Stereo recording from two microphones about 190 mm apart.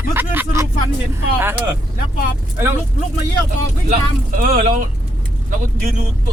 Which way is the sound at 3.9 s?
45° right (ahead or behind).